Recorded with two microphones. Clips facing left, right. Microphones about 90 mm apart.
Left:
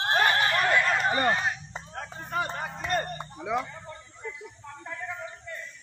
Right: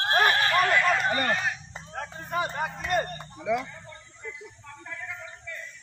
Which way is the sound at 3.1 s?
25° left (ahead or behind).